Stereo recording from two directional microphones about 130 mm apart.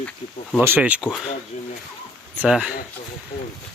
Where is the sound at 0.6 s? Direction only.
15° right (ahead or behind).